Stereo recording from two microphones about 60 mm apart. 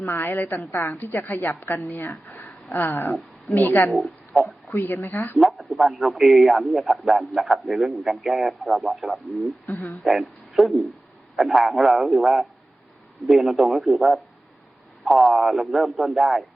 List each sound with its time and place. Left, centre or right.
0.0 s a woman's voice: left
4.3 s a man's voice: centre
4.7 s a woman's voice: left
5.4 s a man's voice: centre
9.6 s speech: left
10.0 s a man's voice: centre